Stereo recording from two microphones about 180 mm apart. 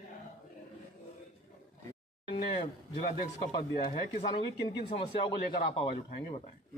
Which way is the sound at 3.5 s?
30° left (ahead or behind).